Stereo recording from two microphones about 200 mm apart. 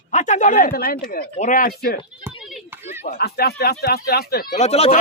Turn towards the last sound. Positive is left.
turn(degrees=30)  # may be behind; listen again after turning